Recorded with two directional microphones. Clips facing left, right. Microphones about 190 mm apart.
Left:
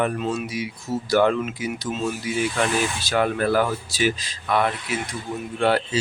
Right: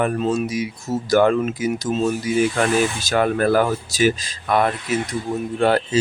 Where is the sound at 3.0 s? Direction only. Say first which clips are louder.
Right 3 dB; 45° right (ahead or behind).